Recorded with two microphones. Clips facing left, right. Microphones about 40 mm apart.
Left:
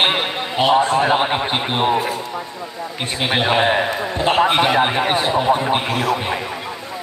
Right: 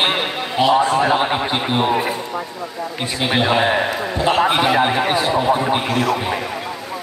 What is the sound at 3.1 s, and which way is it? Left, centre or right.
A man's voice, left.